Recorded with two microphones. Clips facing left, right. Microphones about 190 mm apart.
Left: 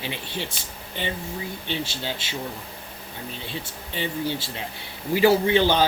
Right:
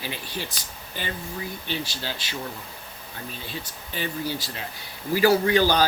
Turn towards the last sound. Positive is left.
turn(degrees=25)  # may be behind; listen again after turning